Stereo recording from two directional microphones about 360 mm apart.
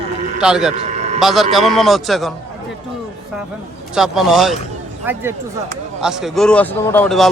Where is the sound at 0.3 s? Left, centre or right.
Centre.